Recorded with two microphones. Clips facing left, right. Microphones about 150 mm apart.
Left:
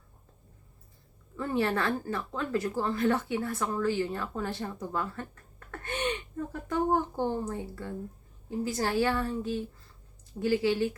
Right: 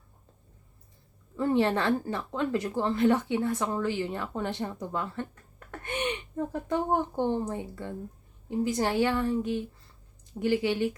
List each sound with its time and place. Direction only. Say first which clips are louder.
1.4 s speech: right 4 dB; 25° right (ahead or behind)